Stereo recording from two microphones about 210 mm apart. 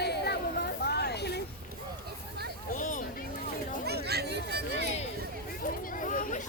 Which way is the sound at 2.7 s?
35° left (ahead or behind).